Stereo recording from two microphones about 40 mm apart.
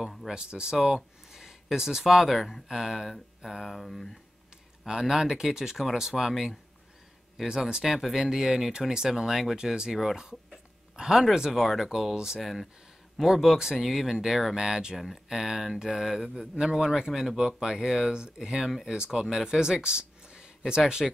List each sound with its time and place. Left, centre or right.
0.3 s speech: centre
4.8 s speech: centre
7.4 s speech: centre
7.8 s speech: centre
11.0 s speech: centre
12.4 s speech: centre
16.3 s speech: centre